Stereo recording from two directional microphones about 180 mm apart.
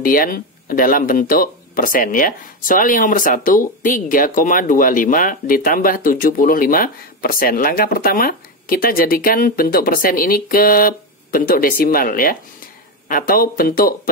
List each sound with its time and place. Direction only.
0.0 s speech: 55° left (ahead or behind)